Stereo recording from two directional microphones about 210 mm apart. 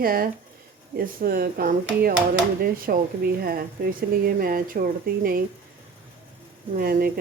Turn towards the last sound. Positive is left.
turn(degrees=-45)  # may be behind; listen again after turning